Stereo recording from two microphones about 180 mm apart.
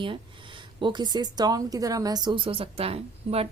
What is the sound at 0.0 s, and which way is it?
A woman's voice, 30° right (ahead or behind).